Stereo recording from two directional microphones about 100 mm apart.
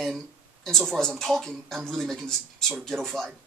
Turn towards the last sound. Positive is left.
turn(degrees=-15)  # may be behind; listen again after turning